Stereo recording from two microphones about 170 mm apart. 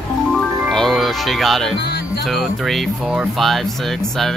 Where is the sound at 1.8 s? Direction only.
75° left (ahead or behind).